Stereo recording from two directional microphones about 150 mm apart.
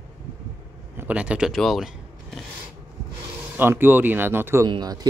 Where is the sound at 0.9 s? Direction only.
10° right (ahead or behind).